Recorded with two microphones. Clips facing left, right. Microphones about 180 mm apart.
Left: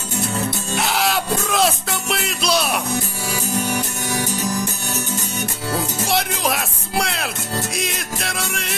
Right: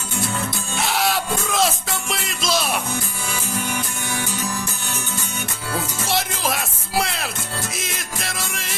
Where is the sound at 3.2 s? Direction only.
40° left (ahead or behind).